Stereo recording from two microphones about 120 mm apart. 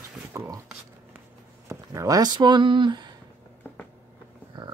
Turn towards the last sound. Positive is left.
turn(degrees=-40)  # may be behind; listen again after turning